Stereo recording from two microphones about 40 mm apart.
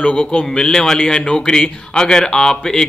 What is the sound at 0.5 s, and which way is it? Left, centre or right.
A man's voice, centre.